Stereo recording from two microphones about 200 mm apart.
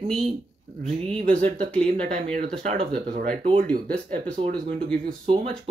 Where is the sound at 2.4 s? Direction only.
45° right (ahead or behind).